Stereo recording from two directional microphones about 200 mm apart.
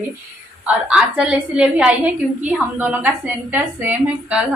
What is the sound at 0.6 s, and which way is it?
A woman's voice, 5° right (ahead or behind).